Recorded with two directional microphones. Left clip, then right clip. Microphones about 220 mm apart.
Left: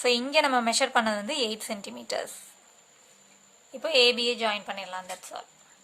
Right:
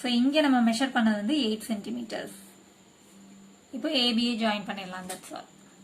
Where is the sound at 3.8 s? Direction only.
30° left (ahead or behind).